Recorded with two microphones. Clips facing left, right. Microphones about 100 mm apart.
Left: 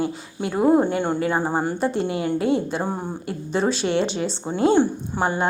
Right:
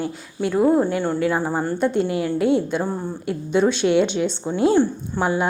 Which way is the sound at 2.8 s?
20° left (ahead or behind).